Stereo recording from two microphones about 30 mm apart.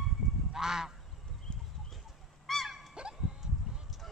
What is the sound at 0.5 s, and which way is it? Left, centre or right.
Goose, centre.